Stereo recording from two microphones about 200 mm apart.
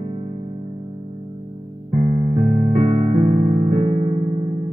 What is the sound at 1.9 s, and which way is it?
Electric piano, 30° right (ahead or behind).